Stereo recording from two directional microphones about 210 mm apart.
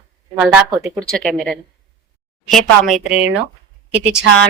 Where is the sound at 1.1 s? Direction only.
5° left (ahead or behind).